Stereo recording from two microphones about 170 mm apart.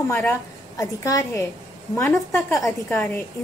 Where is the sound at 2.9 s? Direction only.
10° left (ahead or behind).